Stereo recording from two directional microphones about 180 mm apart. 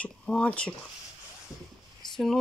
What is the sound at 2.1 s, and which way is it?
Speech, centre (ahead or behind).